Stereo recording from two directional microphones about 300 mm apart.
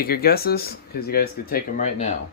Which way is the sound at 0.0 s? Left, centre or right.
Left.